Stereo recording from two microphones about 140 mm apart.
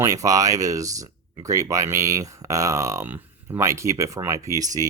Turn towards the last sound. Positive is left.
turn(degrees=-25)  # may be behind; listen again after turning